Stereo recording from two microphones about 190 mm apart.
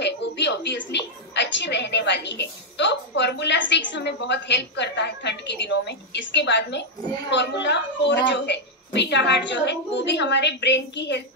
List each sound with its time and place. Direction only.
0.0 s a woman's voice: 65° left (ahead or behind)